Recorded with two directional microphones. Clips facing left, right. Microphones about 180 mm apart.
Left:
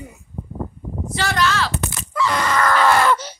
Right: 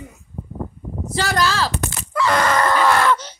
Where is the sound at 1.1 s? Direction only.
35° right (ahead or behind).